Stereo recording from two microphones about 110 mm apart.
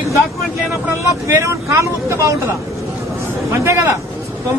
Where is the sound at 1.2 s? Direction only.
25° right (ahead or behind).